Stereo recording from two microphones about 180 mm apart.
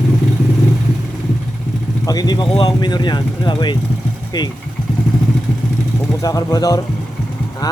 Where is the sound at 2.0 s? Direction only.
20° left (ahead or behind).